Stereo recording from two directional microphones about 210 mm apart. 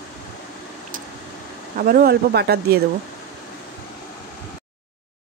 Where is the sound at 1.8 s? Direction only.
45° right (ahead or behind).